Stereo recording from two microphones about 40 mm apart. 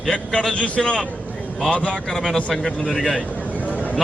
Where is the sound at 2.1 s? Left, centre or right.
Centre.